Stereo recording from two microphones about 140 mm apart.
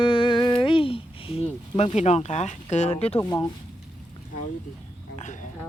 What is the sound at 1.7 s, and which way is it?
Speech, 50° left (ahead or behind).